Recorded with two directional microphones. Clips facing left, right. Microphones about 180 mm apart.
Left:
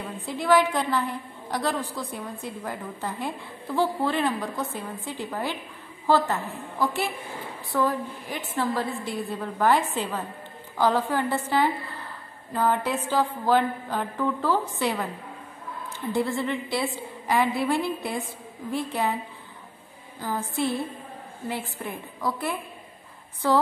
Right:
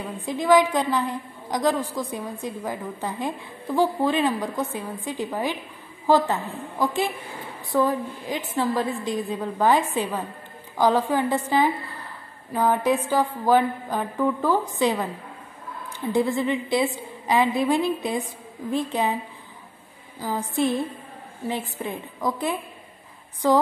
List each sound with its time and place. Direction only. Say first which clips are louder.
0.2 s a woman's voice: right 3 dB; 15° right (ahead or behind)
16.1 s a woman's voice: right 4 dB; 15° right (ahead or behind)
20.2 s a woman's voice: right 3 dB; 15° right (ahead or behind)